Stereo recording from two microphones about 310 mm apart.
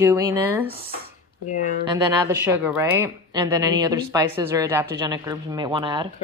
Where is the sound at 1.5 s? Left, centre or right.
Left.